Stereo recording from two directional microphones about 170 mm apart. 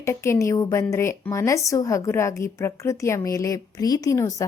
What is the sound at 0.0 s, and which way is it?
A woman's voice, 15° left (ahead or behind).